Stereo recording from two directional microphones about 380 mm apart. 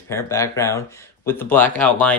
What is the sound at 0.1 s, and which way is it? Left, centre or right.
Speech, centre.